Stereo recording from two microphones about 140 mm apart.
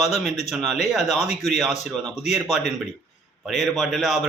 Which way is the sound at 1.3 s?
55° left (ahead or behind).